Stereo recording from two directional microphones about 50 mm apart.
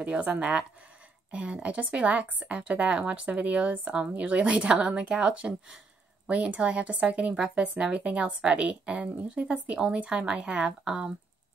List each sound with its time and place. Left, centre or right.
0.0 s speech: right